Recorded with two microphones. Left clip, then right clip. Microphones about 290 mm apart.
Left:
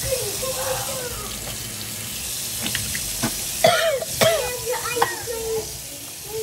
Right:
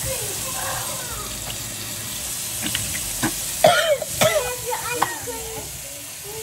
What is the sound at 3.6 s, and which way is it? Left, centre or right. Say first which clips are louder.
Throat clearing: right 2 dB; centre.